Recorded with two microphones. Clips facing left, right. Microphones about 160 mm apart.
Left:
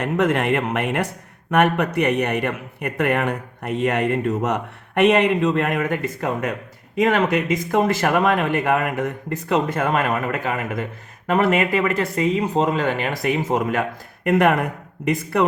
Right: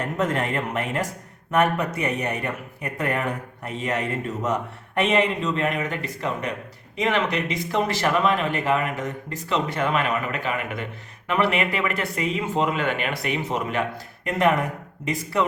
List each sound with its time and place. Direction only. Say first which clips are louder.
0.0 s a man's voice: left 5 dB; 70° left (ahead or behind); by 13.8 s 50° left (ahead or behind)
14.3 s speech: left 4 dB; 60° left (ahead or behind)